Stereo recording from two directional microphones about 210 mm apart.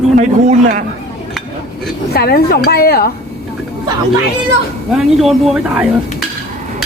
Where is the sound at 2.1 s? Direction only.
45° left (ahead or behind).